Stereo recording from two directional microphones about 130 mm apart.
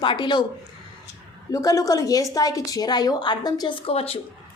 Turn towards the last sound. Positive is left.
turn(degrees=50)  # may be behind; listen again after turning